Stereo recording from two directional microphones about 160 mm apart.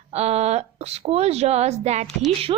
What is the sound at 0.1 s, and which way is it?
A woman's voice, 40° right (ahead or behind).